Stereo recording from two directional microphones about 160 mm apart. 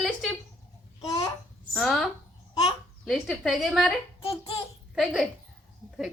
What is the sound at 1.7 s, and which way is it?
Speech, centre (ahead or behind).